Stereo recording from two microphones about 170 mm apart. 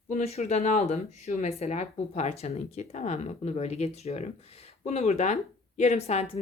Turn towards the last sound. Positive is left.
turn(degrees=40)  # may be behind; listen again after turning